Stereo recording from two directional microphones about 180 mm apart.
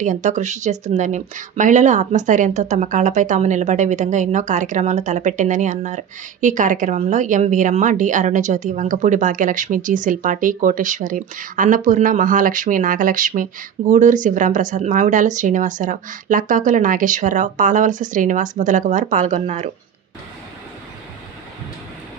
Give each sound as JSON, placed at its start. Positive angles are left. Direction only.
{"t": 0.0, "sound": "speech", "side_deg": -45}